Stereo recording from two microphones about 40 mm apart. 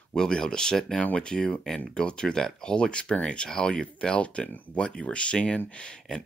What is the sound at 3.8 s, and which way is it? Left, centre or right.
Speech, left.